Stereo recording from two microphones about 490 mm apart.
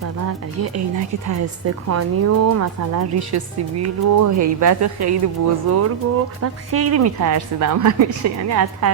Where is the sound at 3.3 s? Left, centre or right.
Right.